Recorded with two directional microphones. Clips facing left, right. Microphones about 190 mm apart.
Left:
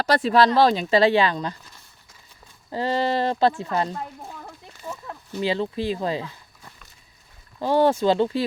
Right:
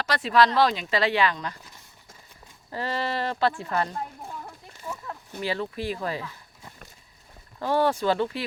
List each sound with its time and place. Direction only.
0.0 s speech: 35° left (ahead or behind)
2.7 s speech: 30° left (ahead or behind)
5.4 s speech: 25° left (ahead or behind)
7.6 s speech: 20° left (ahead or behind)